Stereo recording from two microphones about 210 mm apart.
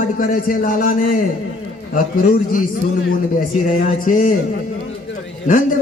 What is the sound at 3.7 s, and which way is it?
Speech, 40° left (ahead or behind).